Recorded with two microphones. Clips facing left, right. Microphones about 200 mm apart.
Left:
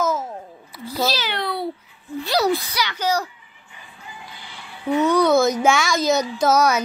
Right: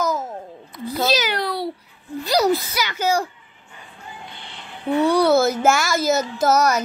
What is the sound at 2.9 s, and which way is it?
Speech, 10° right (ahead or behind).